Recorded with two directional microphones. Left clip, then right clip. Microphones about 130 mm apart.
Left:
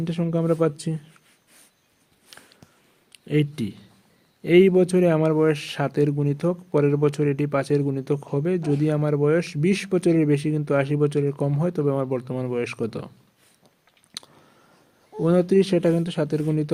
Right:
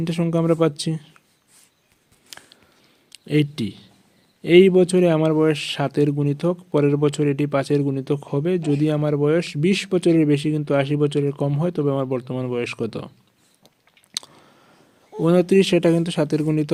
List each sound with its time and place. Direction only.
0.0 s speech: 45° right (ahead or behind)
2.3 s a sound: 50° right (ahead or behind)
3.1 s speech: 45° right (ahead or behind)
14.1 s chewing: 45° right (ahead or behind)
15.2 s speech: 45° right (ahead or behind)